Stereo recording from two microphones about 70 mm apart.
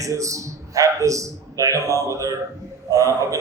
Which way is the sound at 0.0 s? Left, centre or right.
Right.